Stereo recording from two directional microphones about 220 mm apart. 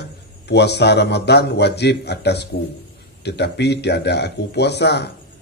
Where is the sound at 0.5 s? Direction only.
50° left (ahead or behind).